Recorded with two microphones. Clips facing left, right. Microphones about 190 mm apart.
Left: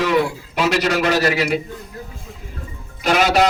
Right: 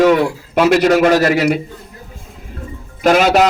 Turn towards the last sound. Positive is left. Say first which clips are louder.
# right 6 dB
turn(degrees=-50)  # may be behind; listen again after turning